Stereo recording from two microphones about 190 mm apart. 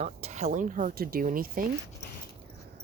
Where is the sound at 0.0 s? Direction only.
35° right (ahead or behind).